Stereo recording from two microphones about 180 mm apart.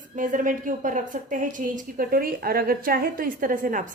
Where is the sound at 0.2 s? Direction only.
45° right (ahead or behind).